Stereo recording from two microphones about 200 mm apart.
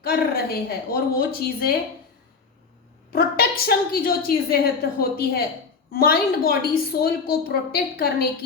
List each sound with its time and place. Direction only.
0.0 s a woman's voice: 50° left (ahead or behind)
3.1 s a woman's voice: 50° left (ahead or behind)